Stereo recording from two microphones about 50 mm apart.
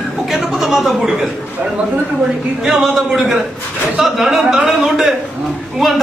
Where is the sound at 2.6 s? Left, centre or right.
Centre.